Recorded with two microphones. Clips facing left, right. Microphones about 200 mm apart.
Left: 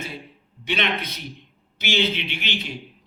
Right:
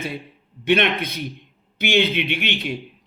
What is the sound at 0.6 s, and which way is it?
Speech, 55° right (ahead or behind).